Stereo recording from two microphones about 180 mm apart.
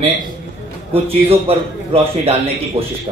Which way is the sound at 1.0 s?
30° right (ahead or behind).